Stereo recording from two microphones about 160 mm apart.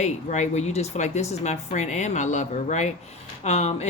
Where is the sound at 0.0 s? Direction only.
45° left (ahead or behind).